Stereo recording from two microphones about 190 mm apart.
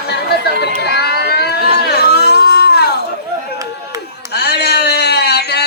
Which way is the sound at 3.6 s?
15° right (ahead or behind).